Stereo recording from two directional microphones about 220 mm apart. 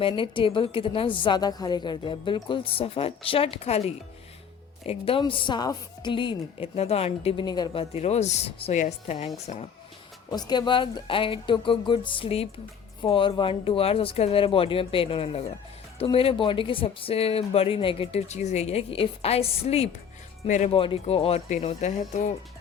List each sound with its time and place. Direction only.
0.0 s a woman's voice: 25° left (ahead or behind)
10.3 s a woman's voice: 20° left (ahead or behind)